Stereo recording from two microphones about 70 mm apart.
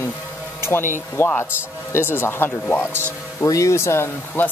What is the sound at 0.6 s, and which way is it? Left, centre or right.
Speech, left.